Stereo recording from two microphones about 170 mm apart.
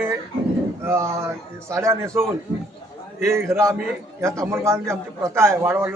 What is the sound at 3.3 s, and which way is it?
A man's voice, 15° right (ahead or behind).